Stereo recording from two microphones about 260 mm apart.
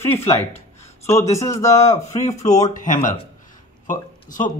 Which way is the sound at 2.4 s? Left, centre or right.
Left.